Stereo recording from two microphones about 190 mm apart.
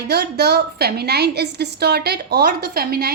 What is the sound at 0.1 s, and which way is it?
A woman's voice, 60° right (ahead or behind).